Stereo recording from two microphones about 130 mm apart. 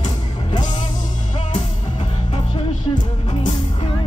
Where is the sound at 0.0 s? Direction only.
35° left (ahead or behind).